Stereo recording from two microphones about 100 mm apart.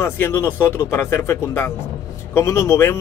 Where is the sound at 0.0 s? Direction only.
25° left (ahead or behind).